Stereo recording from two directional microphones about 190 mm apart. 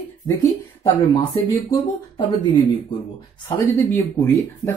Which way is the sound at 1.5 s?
15° left (ahead or behind).